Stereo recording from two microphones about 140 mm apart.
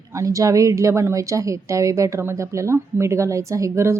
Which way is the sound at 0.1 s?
25° right (ahead or behind).